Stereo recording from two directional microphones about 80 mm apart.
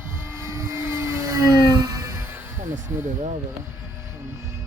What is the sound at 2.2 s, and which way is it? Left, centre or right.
Music, right.